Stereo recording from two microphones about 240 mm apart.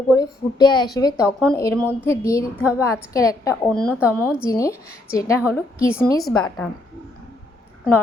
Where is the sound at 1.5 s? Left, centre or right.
Centre.